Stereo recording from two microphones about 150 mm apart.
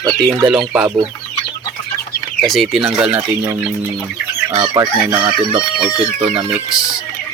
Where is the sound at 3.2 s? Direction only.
20° right (ahead or behind).